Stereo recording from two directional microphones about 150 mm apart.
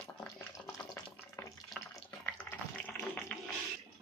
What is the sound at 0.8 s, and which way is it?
Water, 15° left (ahead or behind).